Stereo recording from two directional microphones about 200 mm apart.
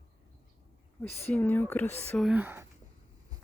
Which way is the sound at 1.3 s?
10° left (ahead or behind).